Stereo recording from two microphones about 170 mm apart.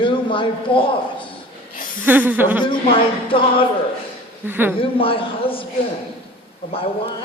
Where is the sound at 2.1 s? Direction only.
10° right (ahead or behind).